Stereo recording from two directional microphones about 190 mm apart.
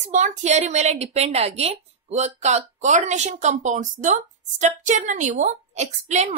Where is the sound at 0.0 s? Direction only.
40° right (ahead or behind).